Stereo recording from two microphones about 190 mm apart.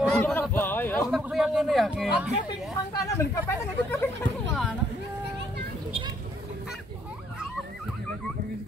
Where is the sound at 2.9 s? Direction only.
15° left (ahead or behind).